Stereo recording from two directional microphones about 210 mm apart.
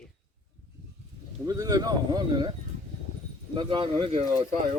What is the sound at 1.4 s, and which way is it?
Speech, 15° right (ahead or behind).